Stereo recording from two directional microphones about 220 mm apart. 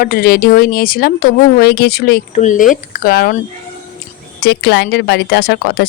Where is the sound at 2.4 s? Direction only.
35° left (ahead or behind).